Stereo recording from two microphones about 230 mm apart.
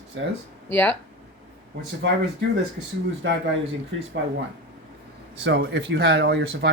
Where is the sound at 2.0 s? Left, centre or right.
Right.